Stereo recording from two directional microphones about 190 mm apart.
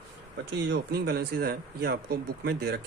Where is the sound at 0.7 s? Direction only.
55° right (ahead or behind).